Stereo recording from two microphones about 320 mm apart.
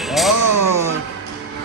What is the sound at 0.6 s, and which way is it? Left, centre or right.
Music, right.